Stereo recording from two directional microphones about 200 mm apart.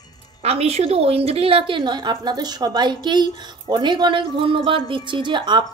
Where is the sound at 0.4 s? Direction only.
30° right (ahead or behind).